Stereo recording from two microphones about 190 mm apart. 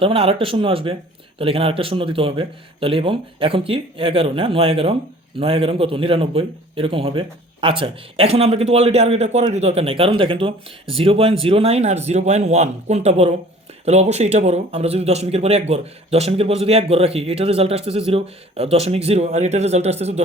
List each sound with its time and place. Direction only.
0.0 s speech: 30° right (ahead or behind)